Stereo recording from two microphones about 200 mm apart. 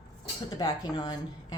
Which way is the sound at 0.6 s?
20° left (ahead or behind).